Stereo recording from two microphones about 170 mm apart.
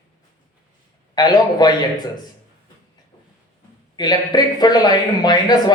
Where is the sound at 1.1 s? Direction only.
25° left (ahead or behind).